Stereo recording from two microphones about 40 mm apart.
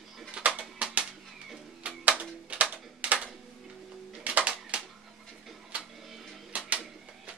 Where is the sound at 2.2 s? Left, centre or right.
Right.